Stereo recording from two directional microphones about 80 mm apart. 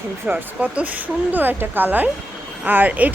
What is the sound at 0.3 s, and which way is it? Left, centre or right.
A woman's voice, right.